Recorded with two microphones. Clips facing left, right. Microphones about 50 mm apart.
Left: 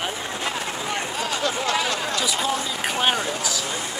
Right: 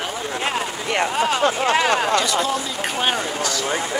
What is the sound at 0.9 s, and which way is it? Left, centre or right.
Speech, right.